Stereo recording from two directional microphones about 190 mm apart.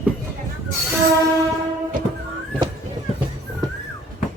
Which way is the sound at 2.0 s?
45° right (ahead or behind).